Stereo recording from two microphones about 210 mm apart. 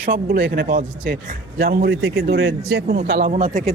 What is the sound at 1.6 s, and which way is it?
A man's voice, 50° right (ahead or behind).